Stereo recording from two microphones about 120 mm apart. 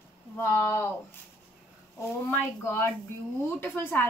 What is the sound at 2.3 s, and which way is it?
A woman's voice, 20° left (ahead or behind).